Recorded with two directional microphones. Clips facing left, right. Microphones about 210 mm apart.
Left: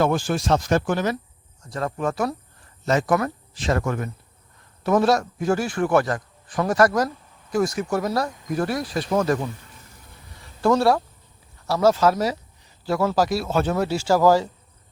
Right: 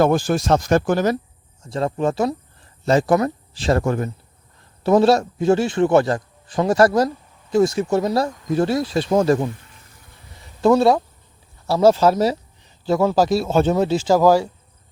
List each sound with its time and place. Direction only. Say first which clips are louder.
0.0 s speech: right 4 dB; 40° right (ahead or behind)
1.6 s a man's voice: right 5 dB; 25° right (ahead or behind)
10.6 s a man's voice: right 4 dB; 20° right (ahead or behind)